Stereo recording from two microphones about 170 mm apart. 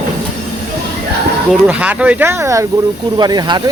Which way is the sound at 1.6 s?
10° right (ahead or behind).